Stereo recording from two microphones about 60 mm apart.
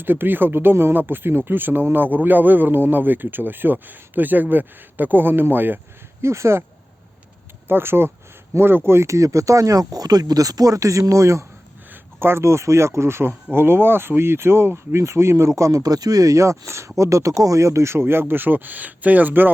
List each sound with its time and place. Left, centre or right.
0.0 s speech: right
6.2 s speech: right
7.7 s speech: right
9.1 s speech: right
11.9 s speech: right